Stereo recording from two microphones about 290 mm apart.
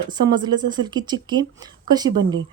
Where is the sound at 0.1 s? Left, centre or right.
Centre.